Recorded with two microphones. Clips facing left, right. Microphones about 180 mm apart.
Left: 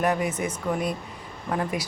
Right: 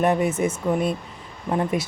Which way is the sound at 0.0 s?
25° right (ahead or behind).